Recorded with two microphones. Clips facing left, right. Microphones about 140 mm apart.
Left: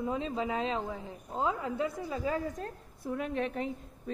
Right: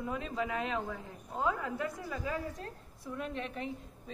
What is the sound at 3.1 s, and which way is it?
Speech, 50° left (ahead or behind).